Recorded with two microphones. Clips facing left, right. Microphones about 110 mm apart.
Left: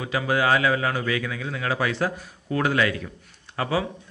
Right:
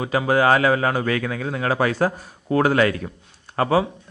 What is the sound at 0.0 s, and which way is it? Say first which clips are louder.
Speech: right 5 dB; 40° right (ahead or behind).